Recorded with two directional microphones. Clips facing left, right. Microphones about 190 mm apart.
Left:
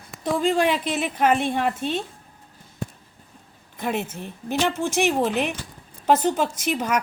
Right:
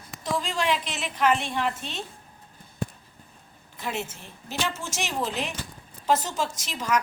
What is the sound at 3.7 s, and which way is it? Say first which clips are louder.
Speech: left 6 dB; 55° left (ahead or behind).